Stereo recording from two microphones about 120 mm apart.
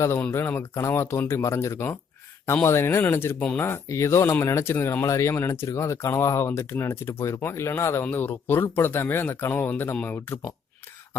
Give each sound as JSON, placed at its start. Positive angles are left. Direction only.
{"t": 0.2, "sound": "speech", "side_deg": 20}